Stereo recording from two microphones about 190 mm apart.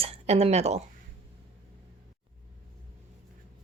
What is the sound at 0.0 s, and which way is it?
Speech, 35° right (ahead or behind).